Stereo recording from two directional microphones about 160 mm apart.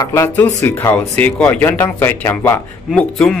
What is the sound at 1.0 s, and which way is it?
Speech, 10° left (ahead or behind).